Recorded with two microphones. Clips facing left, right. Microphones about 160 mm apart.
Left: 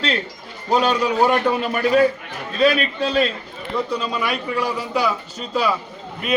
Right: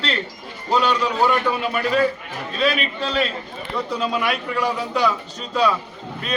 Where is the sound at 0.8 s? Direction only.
45° left (ahead or behind).